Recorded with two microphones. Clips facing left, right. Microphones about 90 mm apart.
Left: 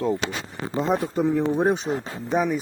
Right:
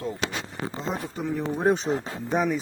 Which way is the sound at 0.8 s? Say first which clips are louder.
Left 11 dB; 55° left (ahead or behind).